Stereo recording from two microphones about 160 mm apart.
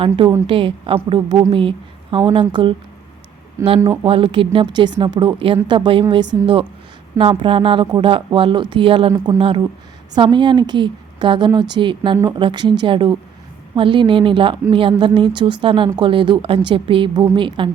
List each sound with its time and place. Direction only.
0.4 s a woman's voice: 35° right (ahead or behind)
3.6 s a woman's voice: 20° right (ahead or behind)
4.0 s a woman's voice: 35° right (ahead or behind)